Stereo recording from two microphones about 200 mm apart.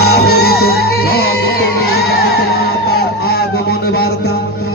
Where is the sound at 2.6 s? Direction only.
50° left (ahead or behind).